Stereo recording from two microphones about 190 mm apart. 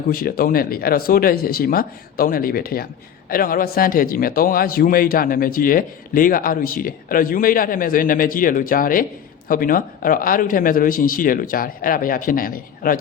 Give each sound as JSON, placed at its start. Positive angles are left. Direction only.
{"t": 0.1, "sound": "a man's voice", "side_deg": 50}